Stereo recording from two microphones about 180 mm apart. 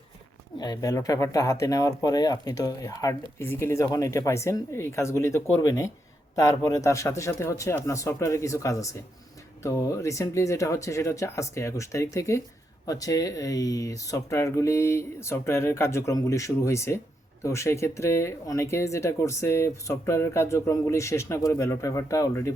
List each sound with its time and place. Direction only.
0.6 s speech: 20° left (ahead or behind)